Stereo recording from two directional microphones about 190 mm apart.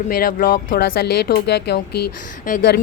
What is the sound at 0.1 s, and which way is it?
Speech, 45° left (ahead or behind).